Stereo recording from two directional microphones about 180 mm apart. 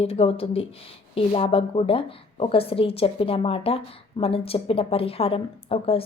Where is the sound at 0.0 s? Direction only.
30° left (ahead or behind).